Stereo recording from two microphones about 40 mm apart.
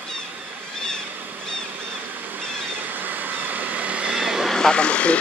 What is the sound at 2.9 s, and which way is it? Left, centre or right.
Vehicle, right.